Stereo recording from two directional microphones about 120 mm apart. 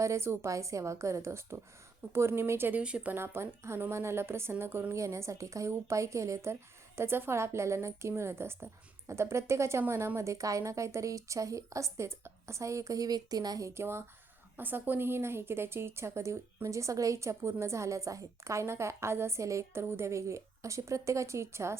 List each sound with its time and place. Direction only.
0.0 s a woman's voice: 25° right (ahead or behind)